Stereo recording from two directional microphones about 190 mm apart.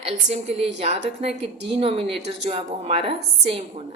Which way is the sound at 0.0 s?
35° right (ahead or behind).